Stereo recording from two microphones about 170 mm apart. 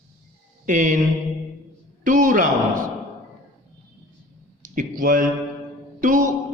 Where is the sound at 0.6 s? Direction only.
50° right (ahead or behind).